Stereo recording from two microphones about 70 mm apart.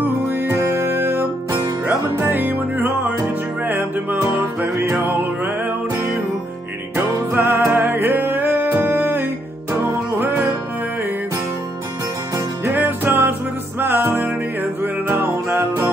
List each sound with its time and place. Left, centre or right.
0.3 s music: right
7.2 s music: right
12.4 s music: right